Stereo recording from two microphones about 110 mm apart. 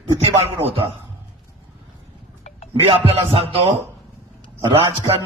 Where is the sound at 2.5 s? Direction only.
85° left.